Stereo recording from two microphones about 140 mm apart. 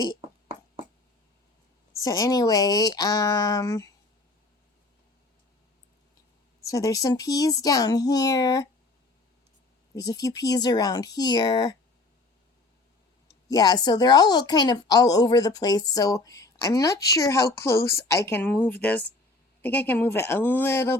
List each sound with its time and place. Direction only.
2.0 s a woman's voice: 25° left (ahead or behind)
6.6 s a woman's voice: 25° left (ahead or behind)
9.9 s a woman's voice: 25° left (ahead or behind)
13.5 s a woman's voice: 30° left (ahead or behind)